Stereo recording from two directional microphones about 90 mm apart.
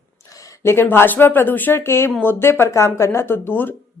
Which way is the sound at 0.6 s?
25° left (ahead or behind).